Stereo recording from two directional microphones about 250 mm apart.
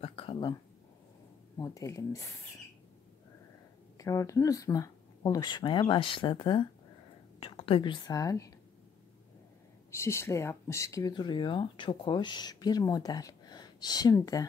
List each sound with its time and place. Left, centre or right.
0.0 s speech: left
1.6 s speech: centre
4.0 s speech: centre
9.8 s speech: centre